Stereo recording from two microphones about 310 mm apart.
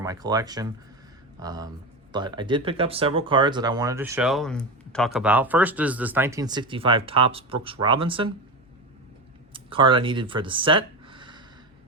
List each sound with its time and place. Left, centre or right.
0.0 s speech: centre
9.5 s speech: centre